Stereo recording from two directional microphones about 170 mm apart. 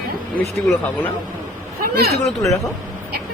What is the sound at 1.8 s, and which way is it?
Speech, 65° right (ahead or behind).